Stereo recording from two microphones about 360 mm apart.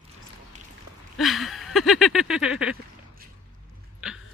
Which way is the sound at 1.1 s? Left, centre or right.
Centre.